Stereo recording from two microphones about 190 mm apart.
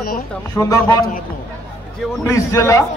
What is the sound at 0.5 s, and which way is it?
Speech, 15° left (ahead or behind).